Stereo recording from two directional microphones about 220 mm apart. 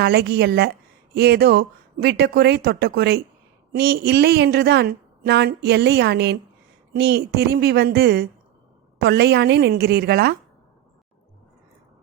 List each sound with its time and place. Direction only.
0.0 s speech: 45° right (ahead or behind)